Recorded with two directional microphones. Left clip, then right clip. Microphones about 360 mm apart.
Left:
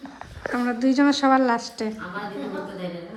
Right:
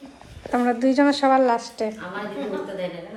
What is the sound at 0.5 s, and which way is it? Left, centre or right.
A woman's voice, centre.